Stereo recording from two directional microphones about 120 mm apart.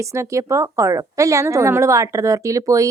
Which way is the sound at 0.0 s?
25° right (ahead or behind).